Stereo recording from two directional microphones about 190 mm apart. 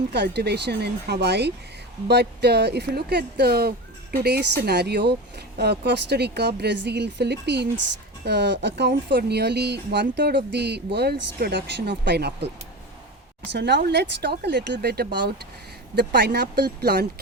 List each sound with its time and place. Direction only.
0.1 s speech: 60° right (ahead or behind)
13.5 s speech: 65° right (ahead or behind)